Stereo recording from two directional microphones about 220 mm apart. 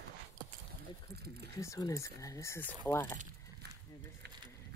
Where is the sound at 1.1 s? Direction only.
45° right (ahead or behind).